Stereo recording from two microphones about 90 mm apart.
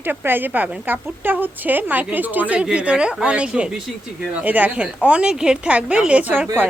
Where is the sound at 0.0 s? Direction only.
20° right (ahead or behind).